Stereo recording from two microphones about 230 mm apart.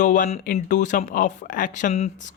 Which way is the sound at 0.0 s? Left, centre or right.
Left.